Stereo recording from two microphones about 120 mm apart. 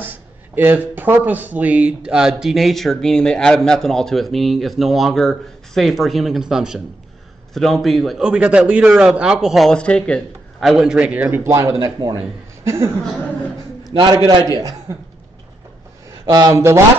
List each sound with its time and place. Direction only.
0.0 s speech: 15° right (ahead or behind); by 10.2 s 10° left (ahead or behind)
10.6 s a man's voice: 5° right (ahead or behind); by 12.2 s 35° right (ahead or behind)
12.6 s a woman's voice: 20° right (ahead or behind)
13.8 s a man's voice: 40° right (ahead or behind)
14.5 s speech: 30° right (ahead or behind)
16.1 s speech: 30° right (ahead or behind)